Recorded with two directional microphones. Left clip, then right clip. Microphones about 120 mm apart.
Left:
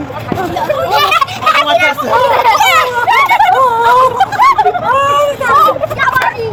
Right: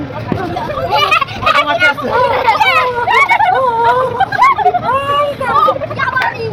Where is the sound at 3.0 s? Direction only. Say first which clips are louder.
Left 1 dB; 5° left (ahead or behind).